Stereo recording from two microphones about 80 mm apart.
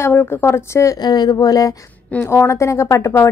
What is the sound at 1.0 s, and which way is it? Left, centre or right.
Speech, left.